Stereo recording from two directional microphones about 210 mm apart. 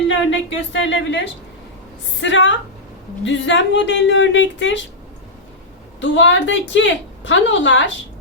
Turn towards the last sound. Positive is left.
turn(degrees=60)  # may be behind; listen again after turning